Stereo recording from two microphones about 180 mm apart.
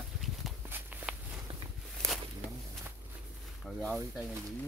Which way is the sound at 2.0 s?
5° left (ahead or behind).